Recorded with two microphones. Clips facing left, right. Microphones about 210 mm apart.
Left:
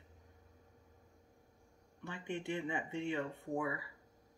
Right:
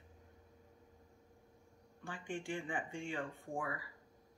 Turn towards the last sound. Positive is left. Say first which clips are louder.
# left 4 dB
turn(degrees=25)  # may be behind; listen again after turning